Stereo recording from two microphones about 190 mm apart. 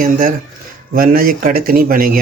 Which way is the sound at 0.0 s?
45° right (ahead or behind).